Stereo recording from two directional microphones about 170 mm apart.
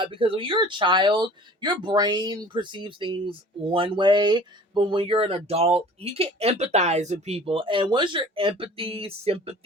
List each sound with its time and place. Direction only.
0.0 s speech: 30° right (ahead or behind)